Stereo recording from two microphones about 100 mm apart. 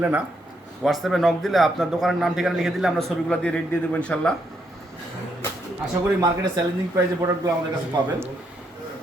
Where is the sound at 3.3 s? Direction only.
10° left (ahead or behind).